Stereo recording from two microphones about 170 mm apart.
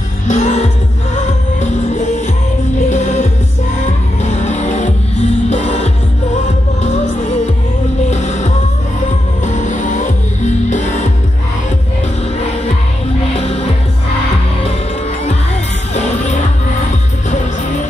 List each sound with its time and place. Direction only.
0.3 s music: 40° left (ahead or behind)
2.9 s music: 45° left (ahead or behind)
4.2 s vehicle: 45° left (ahead or behind)
5.5 s music: 40° left (ahead or behind)
8.1 s music: 40° left (ahead or behind)
9.5 s music: 45° left (ahead or behind)
15.9 s music: 45° left (ahead or behind)